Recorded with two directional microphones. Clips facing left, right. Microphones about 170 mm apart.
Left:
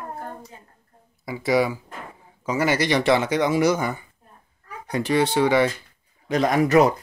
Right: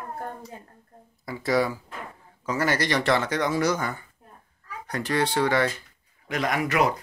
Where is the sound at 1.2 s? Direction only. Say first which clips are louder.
Left 3 dB; 10° left (ahead or behind).